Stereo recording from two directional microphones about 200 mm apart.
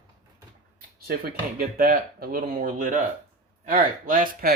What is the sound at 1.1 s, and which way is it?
Speech, 50° right (ahead or behind).